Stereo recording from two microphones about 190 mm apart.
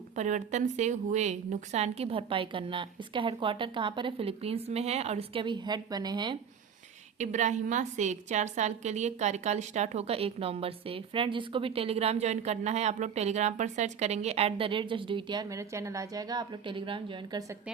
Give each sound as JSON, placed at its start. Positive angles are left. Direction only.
{"t": 0.2, "sound": "a woman's voice", "side_deg": -40}
{"t": 7.2, "sound": "a woman's voice", "side_deg": -40}